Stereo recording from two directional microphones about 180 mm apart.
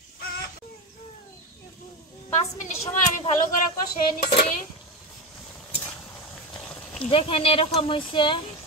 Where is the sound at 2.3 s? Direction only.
40° left (ahead or behind).